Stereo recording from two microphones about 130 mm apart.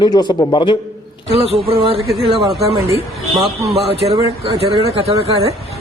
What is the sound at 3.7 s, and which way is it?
Speech, 50° right (ahead or behind).